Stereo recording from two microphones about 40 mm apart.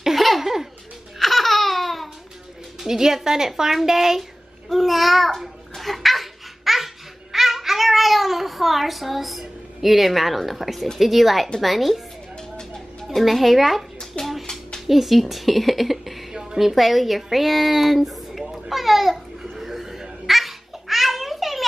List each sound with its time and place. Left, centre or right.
0.0 s laughter: centre
1.2 s laughter: centre
2.8 s speech: centre
4.2 s babbling: centre
7.3 s a sound: centre
11.0 s a woman's voice: centre
13.1 s a woman's voice: centre
14.2 s a sound: left
14.9 s a woman's voice: centre
19.5 s babbling: centre